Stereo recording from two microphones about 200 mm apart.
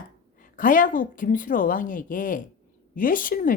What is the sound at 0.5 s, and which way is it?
Speech, 45° left (ahead or behind).